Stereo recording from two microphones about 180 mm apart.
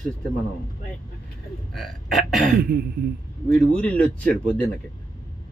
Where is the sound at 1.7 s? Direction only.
Centre (ahead or behind).